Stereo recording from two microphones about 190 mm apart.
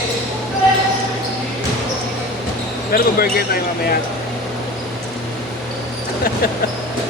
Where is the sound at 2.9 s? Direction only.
50° left (ahead or behind).